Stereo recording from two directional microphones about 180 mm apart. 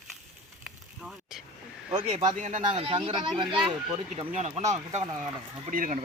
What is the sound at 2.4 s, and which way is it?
Speech, 40° right (ahead or behind).